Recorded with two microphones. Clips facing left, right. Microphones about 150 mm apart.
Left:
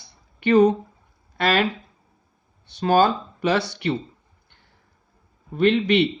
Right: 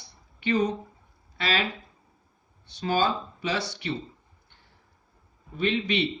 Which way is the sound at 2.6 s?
60° left (ahead or behind).